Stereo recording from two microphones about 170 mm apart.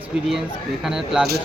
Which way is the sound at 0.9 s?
5° right (ahead or behind).